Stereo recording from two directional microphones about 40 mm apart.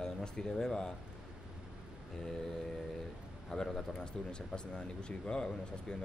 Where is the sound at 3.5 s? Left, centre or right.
Centre.